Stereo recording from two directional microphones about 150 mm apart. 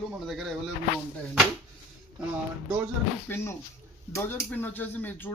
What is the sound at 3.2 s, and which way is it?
Speech, 15° left (ahead or behind).